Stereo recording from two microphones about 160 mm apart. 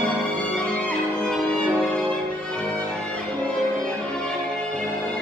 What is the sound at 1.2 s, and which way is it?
Music, 5° left (ahead or behind).